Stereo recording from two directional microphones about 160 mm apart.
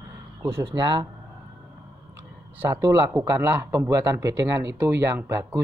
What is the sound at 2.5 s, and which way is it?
Speech, 15° right (ahead or behind).